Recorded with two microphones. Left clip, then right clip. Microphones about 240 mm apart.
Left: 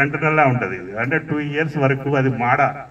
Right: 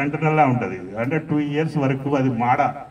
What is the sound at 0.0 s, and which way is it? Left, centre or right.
A man's voice, right.